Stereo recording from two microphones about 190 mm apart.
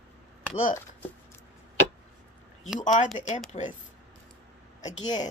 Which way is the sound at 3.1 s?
40° left (ahead or behind).